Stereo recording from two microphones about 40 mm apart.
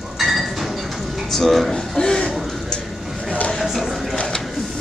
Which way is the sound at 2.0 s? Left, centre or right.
Centre.